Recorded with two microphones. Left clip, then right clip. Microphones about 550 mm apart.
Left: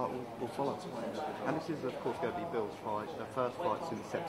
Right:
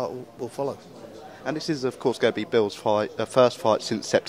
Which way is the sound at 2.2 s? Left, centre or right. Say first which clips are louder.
Right 16 dB; right.